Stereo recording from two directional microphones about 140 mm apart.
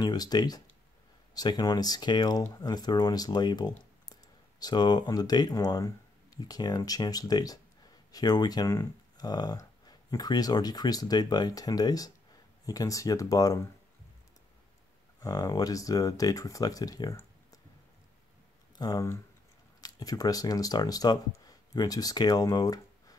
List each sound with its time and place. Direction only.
0.0 s speech: 30° left (ahead or behind)
15.1 s speech: 25° left (ahead or behind)
18.8 s speech: 25° left (ahead or behind)